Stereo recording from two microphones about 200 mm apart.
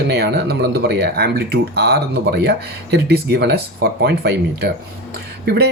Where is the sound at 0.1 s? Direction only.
55° right (ahead or behind).